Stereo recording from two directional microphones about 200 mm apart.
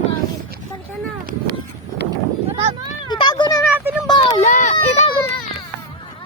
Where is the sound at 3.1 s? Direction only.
20° left (ahead or behind).